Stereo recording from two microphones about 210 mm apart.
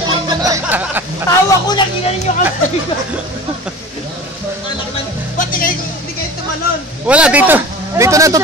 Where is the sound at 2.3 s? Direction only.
35° left (ahead or behind).